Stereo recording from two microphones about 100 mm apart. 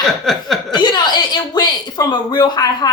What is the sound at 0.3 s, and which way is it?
Chuckle, centre (ahead or behind).